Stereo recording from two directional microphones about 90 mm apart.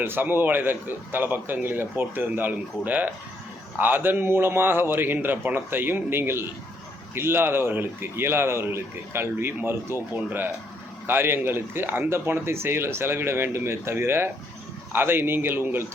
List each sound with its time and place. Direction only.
0.0 s speech: 25° right (ahead or behind)